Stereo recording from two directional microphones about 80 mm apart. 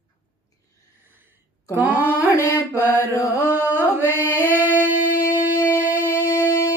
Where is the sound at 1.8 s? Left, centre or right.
Right.